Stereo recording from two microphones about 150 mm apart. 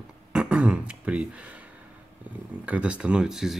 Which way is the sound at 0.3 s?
5° right (ahead or behind).